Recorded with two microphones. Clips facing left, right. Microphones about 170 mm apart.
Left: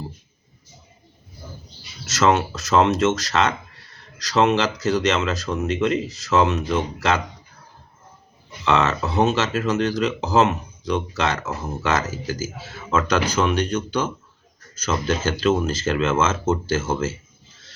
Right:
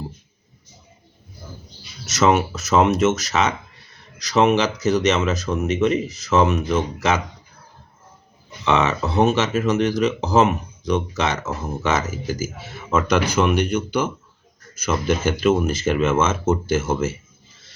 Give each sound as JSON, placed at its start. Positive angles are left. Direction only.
{"t": 2.1, "sound": "speech", "side_deg": -10}
{"t": 8.6, "sound": "speech", "side_deg": -10}